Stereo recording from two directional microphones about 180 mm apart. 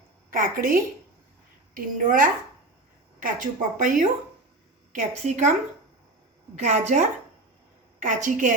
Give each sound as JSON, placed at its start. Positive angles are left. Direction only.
{"t": 0.3, "sound": "a woman's voice", "side_deg": -50}
{"t": 6.6, "sound": "a woman's voice", "side_deg": -40}